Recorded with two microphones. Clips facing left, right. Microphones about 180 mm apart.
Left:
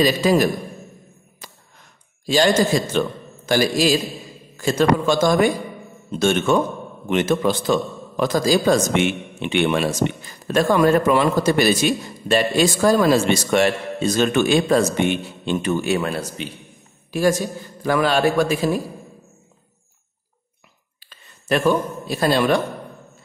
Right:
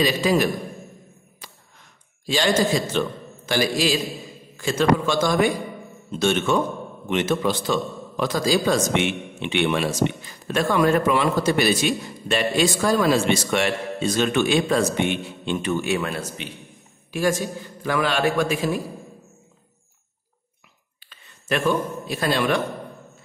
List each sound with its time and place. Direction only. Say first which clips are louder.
0.0 s a man's voice: left 3 dB; 40° left (ahead or behind)
2.2 s a man's voice: left 4 dB; 45° left (ahead or behind)
21.0 s a man's voice: left 2 dB; 40° left (ahead or behind)